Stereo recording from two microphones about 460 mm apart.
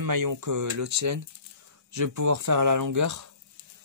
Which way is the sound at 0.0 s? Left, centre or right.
Right.